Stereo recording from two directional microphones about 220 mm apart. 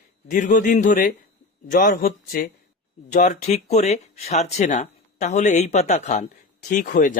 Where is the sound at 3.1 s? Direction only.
30° left (ahead or behind).